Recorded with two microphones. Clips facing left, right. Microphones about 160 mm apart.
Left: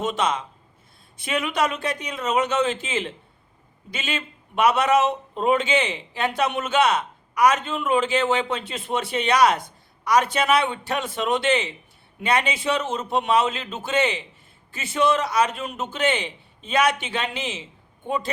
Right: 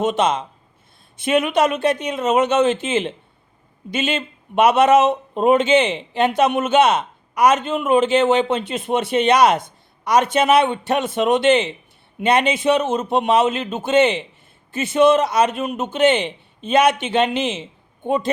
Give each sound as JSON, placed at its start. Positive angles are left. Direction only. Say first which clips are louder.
{"t": 0.0, "sound": "a man's voice", "louder": "right 5 dB", "side_deg": -20}